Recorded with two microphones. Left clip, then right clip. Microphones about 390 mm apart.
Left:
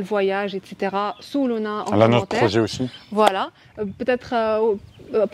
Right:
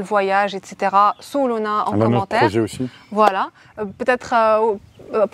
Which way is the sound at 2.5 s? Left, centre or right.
Left.